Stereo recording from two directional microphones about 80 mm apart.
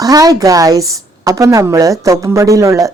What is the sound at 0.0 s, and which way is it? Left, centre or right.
A woman's voice, right.